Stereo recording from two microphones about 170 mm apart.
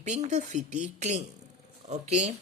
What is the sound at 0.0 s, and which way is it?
Speech, 45° right (ahead or behind).